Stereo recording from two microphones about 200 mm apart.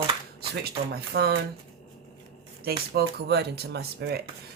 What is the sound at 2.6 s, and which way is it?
Speech, 55° right (ahead or behind).